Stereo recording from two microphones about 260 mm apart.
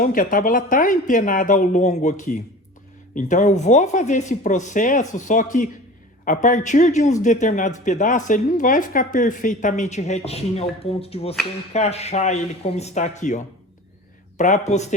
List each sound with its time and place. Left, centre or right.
0.0 s a woman's voice: left